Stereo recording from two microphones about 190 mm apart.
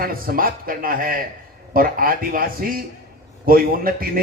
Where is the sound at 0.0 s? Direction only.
50° right (ahead or behind).